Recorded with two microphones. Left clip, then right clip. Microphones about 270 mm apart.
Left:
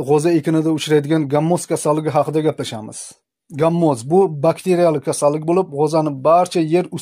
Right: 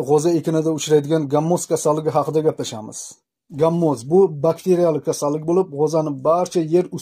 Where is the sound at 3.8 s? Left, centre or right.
Left.